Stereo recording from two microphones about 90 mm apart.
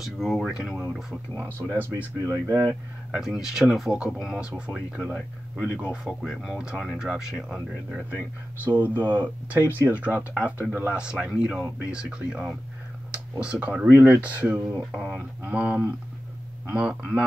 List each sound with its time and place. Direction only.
0.0 s speech: 5° left (ahead or behind)
1.7 s speech: 20° right (ahead or behind)
2.4 s speech: 35° right (ahead or behind)
3.1 s speech: 5° right (ahead or behind)
8.6 s speech: 20° right (ahead or behind)
14.9 s speech: 5° right (ahead or behind)
15.1 s speech: 15° right (ahead or behind)